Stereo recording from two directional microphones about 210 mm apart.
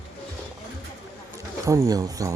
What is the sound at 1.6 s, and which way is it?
Speech, 15° right (ahead or behind).